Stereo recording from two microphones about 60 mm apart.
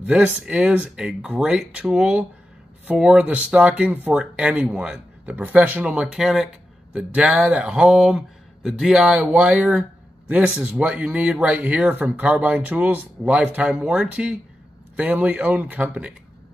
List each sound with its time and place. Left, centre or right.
0.0 s speech: right
2.9 s speech: centre
4.1 s speech: centre
4.6 s speech: right
6.1 s speech: centre
7.0 s speech: right
15.0 s speech: right